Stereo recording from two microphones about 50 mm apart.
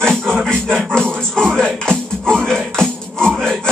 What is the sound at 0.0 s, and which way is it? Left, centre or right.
Music, centre.